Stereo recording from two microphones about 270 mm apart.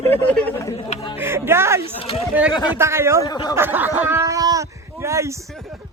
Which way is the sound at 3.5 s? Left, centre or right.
Centre.